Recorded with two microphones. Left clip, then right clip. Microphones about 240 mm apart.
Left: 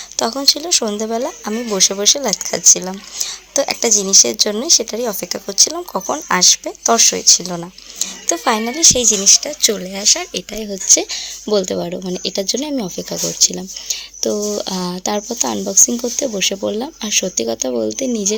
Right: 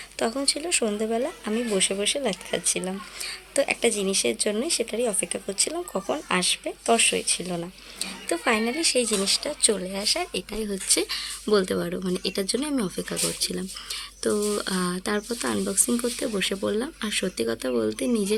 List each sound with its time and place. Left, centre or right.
0.2 s speech: centre
15.7 s speech: centre
16.2 s speech: centre